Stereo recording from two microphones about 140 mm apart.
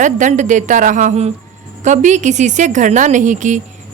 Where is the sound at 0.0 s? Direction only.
60° right (ahead or behind).